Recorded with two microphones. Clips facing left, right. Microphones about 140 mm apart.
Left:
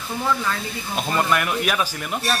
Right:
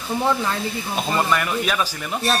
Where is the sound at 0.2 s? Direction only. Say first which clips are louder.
Right 2 dB; 25° right (ahead or behind).